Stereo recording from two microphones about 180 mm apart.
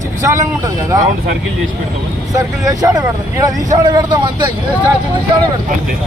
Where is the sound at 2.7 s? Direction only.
20° right (ahead or behind).